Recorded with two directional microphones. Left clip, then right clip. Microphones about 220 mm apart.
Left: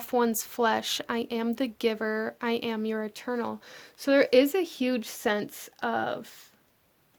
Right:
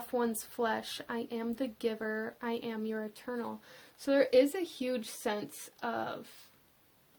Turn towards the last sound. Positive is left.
turn(degrees=45)  # may be behind; listen again after turning